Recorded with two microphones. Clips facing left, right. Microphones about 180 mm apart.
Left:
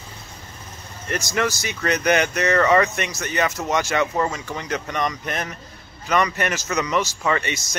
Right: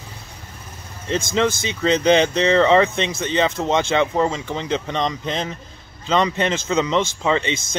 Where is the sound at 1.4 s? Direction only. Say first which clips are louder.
Right 3 dB; 20° right (ahead or behind).